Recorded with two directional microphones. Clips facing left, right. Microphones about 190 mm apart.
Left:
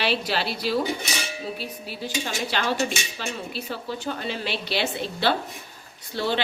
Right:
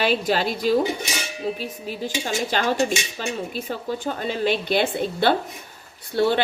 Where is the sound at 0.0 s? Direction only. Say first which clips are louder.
Right 4 dB; 45° right (ahead or behind).